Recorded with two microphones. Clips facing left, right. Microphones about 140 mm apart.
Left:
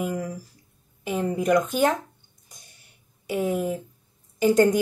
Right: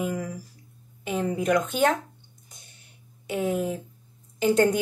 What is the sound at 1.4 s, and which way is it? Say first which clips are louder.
Speech: left 3 dB; 45° left (ahead or behind).